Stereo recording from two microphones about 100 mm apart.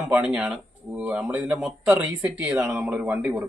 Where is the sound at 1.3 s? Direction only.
25° right (ahead or behind).